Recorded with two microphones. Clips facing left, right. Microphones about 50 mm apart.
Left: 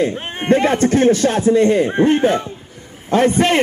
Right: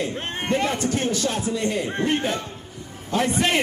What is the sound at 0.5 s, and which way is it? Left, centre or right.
A man's voice, left.